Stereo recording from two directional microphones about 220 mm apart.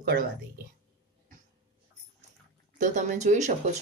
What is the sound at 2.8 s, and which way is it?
Speech, 35° right (ahead or behind).